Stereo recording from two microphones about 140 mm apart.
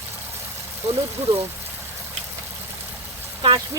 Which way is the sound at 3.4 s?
40° right (ahead or behind).